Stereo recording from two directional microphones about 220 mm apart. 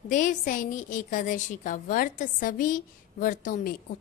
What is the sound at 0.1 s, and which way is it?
A woman's voice, 35° left (ahead or behind).